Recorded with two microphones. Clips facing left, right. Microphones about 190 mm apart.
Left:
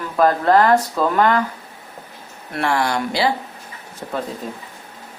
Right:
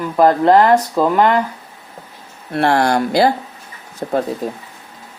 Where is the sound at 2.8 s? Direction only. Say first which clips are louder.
Right 6 dB; 45° right (ahead or behind).